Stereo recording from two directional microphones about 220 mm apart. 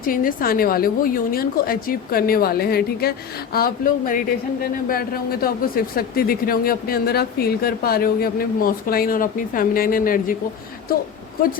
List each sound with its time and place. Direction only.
0.0 s speech: 40° left (ahead or behind)